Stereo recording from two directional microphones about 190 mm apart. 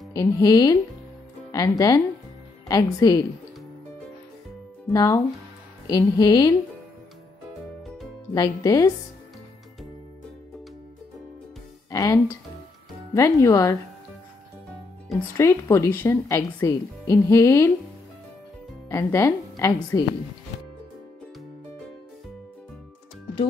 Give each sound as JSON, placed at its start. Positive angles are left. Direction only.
{"t": 0.1, "sound": "speech", "side_deg": 15}
{"t": 4.8, "sound": "speech", "side_deg": 15}
{"t": 8.4, "sound": "speech", "side_deg": 15}
{"t": 11.9, "sound": "speech", "side_deg": 15}
{"t": 15.3, "sound": "speech", "side_deg": 15}
{"t": 18.9, "sound": "speech", "side_deg": 15}